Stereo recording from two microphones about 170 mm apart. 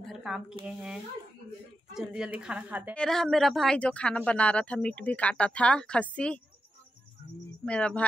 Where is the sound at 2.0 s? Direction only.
5° right (ahead or behind).